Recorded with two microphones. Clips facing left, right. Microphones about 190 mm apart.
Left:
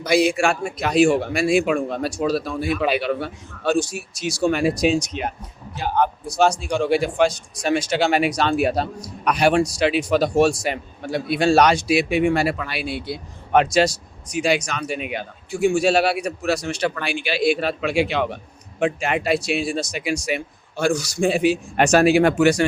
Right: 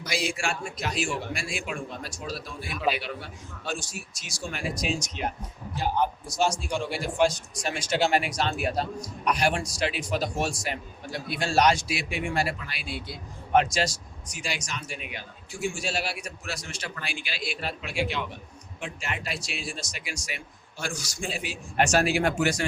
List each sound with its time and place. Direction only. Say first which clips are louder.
0.0 s a man's voice: left 12 dB; 60° left (ahead or behind); by 18.3 s 80° left
18.9 s a man's voice: left 13 dB; 65° left (ahead or behind)